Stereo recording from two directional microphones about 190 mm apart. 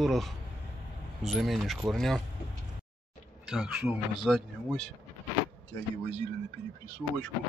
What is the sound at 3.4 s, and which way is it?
Speech, centre (ahead or behind).